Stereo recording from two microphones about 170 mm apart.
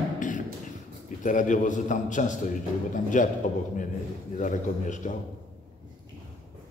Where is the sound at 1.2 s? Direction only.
50° left (ahead or behind).